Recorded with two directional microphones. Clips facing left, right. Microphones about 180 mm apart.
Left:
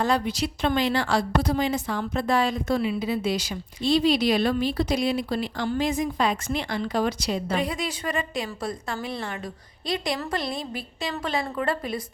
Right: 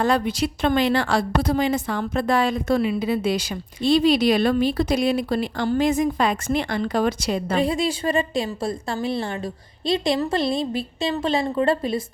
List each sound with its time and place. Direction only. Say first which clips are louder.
0.0 s a woman's voice: right 3 dB; 55° right (ahead or behind)
7.5 s a woman's voice: right 6 dB; 30° right (ahead or behind)